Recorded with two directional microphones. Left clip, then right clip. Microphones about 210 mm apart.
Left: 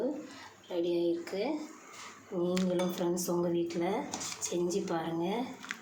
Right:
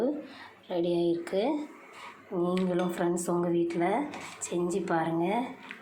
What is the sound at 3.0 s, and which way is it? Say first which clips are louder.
Speech: right 3 dB; 5° right (ahead or behind).